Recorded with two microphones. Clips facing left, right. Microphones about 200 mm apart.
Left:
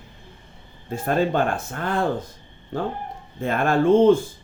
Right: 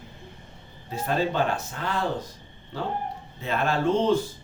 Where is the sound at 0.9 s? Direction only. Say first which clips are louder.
Left 4 dB; 50° left (ahead or behind).